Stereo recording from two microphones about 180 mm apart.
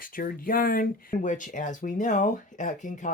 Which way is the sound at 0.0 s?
50° left (ahead or behind).